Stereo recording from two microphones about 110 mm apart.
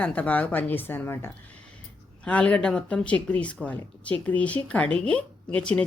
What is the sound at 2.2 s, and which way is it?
Speech, 10° left (ahead or behind).